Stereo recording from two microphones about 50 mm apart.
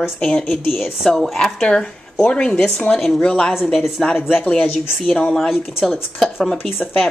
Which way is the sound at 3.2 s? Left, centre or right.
Centre.